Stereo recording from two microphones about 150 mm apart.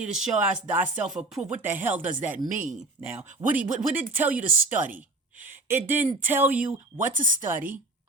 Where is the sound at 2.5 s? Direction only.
55° right (ahead or behind).